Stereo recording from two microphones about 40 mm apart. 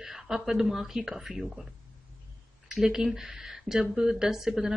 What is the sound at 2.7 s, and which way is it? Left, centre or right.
Speech, centre.